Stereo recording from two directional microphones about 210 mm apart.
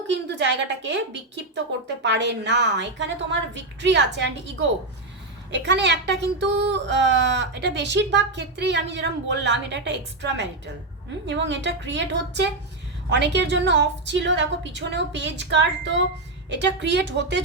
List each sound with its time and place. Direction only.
0.1 s speech: 55° right (ahead or behind)
5.5 s speech: 55° right (ahead or behind)